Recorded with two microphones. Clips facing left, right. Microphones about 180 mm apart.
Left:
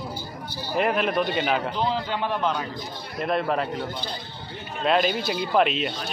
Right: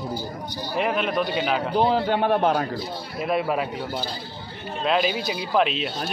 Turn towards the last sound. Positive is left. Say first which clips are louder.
# left 1 dB
turn(degrees=0)  # may be behind; listen again after turning